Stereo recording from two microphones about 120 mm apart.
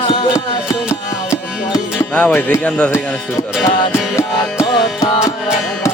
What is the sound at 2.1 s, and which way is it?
Speech, 10° left (ahead or behind).